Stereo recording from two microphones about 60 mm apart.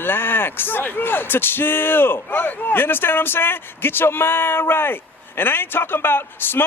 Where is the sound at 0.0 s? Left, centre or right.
Left.